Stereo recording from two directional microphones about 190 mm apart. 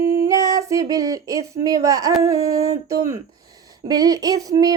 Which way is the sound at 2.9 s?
15° right (ahead or behind).